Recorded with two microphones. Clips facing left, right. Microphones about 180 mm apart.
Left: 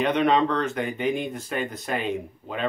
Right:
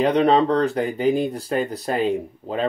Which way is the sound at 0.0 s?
35° right (ahead or behind).